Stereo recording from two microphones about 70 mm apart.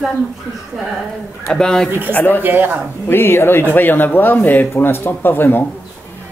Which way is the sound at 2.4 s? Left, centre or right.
Right.